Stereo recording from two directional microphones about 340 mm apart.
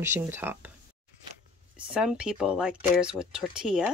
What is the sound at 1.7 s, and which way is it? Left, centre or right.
Speech, centre.